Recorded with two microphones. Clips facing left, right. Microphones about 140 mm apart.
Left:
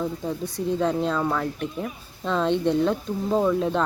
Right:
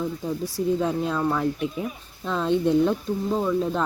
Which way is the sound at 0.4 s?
5° right (ahead or behind).